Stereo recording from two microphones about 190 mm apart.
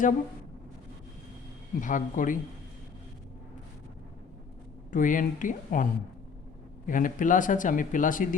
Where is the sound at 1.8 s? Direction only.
45° left (ahead or behind).